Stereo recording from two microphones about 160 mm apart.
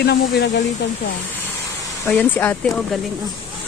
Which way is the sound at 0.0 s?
90° left.